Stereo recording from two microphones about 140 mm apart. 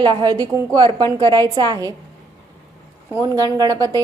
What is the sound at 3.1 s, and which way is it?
Speech, 25° right (ahead or behind).